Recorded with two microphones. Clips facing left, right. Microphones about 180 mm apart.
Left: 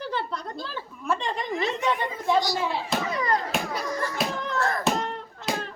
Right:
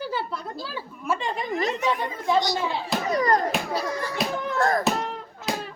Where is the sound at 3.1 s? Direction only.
40° right (ahead or behind).